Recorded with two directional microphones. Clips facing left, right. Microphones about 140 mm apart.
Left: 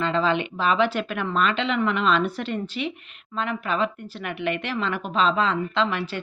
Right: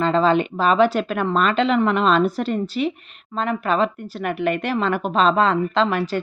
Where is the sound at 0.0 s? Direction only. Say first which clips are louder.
Right 5 dB; 40° right (ahead or behind).